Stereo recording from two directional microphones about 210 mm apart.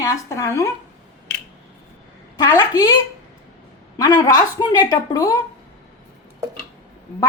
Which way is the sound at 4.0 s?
15° left (ahead or behind).